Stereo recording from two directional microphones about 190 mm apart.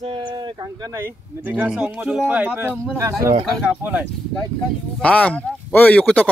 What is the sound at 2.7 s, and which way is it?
Speech, 5° left (ahead or behind).